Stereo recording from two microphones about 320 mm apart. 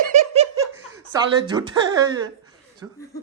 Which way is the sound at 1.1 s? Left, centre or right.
Centre.